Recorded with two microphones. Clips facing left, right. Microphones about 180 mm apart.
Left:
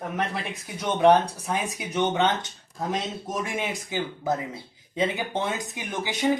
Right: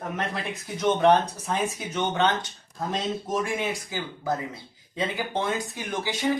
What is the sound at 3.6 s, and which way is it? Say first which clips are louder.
Speech: left 1 dB; 20° left (ahead or behind).